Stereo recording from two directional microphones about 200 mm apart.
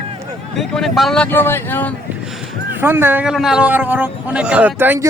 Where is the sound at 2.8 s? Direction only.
10° right (ahead or behind).